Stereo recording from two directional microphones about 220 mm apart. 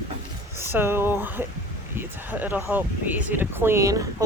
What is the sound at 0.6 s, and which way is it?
Speech, 10° right (ahead or behind).